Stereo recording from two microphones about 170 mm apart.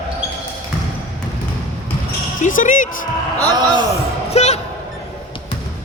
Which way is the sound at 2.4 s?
50° left (ahead or behind).